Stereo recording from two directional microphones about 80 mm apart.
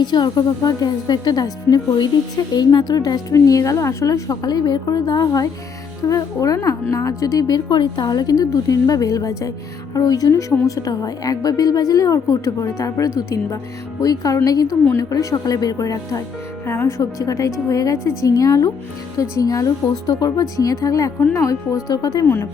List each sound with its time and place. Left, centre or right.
0.0 s a woman's voice: left
16.6 s speech: left
17.0 s a woman's voice: left